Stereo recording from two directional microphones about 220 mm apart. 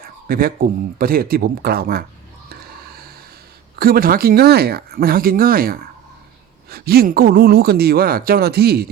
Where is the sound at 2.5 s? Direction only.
45° right (ahead or behind).